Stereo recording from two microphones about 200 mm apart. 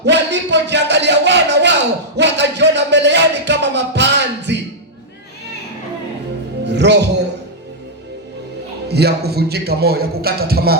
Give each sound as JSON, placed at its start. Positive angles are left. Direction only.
{"t": 0.0, "sound": "a sound", "side_deg": -60}
{"t": 2.1, "sound": "music", "side_deg": -60}
{"t": 6.7, "sound": "music", "side_deg": -60}
{"t": 8.9, "sound": "a man's voice", "side_deg": -55}